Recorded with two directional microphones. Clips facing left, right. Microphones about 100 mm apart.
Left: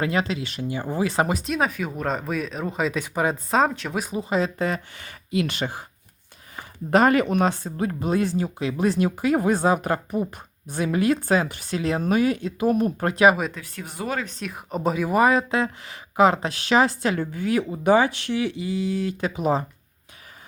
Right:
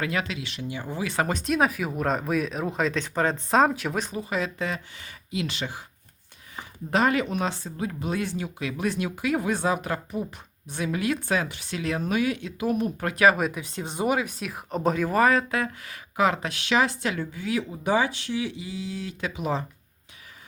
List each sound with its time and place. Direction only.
0.0 s speech: 30° left (ahead or behind)
1.3 s speech: centre (ahead or behind)
4.2 s speech: 30° left (ahead or behind); by 5.8 s 50° left (ahead or behind)
6.9 s speech: 50° left (ahead or behind)
13.5 s speech: 20° right (ahead or behind); by 19.1 s 55° left (ahead or behind)
19.2 s speech: 40° left (ahead or behind)